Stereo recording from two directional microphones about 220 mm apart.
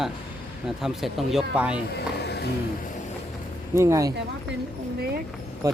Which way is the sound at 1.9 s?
50° left (ahead or behind).